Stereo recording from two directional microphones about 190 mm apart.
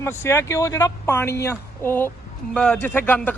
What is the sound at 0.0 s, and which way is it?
A woman's voice, 15° left (ahead or behind).